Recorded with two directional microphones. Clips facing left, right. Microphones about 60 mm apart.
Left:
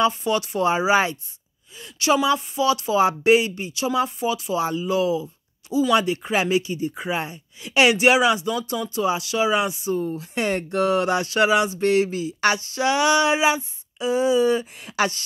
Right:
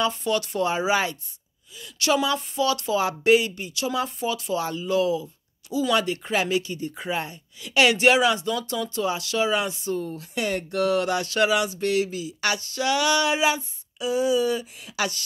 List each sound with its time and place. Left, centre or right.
0.0 s speech: centre
2.2 s speech: centre
10.0 s speech: left
12.5 s speech: left